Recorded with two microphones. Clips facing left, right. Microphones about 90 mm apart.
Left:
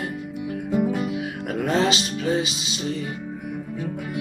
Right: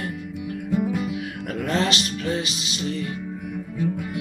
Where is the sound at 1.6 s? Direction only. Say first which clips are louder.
Left 2 dB; 15° left (ahead or behind).